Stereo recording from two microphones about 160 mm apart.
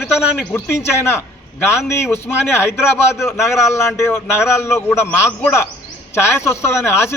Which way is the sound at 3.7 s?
15° left (ahead or behind).